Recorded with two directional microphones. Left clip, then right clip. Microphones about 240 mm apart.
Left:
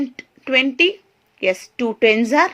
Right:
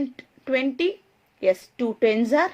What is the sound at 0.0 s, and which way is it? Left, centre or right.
A woman's voice, left.